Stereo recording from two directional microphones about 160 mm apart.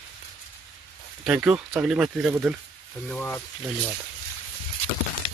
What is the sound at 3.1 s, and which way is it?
Speech, 10° left (ahead or behind).